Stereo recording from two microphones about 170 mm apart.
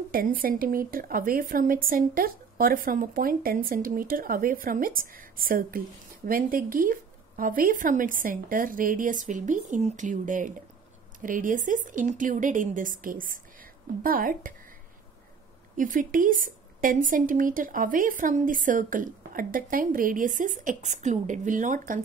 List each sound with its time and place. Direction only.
0.1 s a woman's voice: 55° right (ahead or behind)
15.7 s a woman's voice: 50° right (ahead or behind)